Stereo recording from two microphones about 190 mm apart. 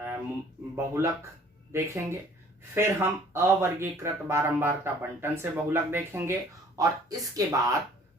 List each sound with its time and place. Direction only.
0.8 s speech: 15° right (ahead or behind)